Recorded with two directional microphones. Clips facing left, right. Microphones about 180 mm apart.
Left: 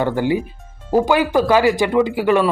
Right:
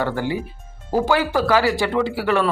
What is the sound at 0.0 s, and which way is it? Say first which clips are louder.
Speech: left 5 dB; 15° left (ahead or behind).